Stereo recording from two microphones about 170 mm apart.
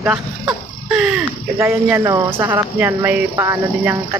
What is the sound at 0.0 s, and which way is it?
Speech, 5° right (ahead or behind).